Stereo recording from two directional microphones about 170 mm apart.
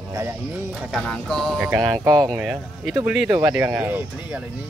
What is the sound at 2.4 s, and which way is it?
Speech, 5° right (ahead or behind).